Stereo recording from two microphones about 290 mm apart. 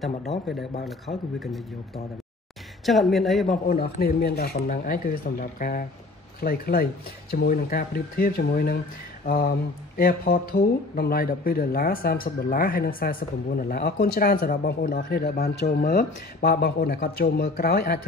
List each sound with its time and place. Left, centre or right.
0.5 s a man's voice: centre
2.8 s a man's voice: centre
3.6 s speech: left